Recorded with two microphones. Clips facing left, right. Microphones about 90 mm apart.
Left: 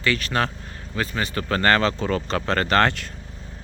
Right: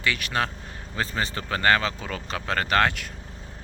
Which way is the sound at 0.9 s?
30° right (ahead or behind).